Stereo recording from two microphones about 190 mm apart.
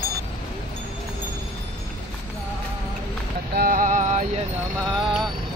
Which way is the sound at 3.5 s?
45° right (ahead or behind).